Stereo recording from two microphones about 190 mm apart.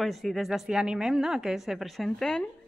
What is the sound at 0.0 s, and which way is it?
A woman's voice, centre (ahead or behind).